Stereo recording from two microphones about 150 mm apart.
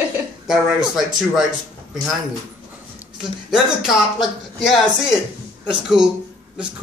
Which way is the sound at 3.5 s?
5° right (ahead or behind).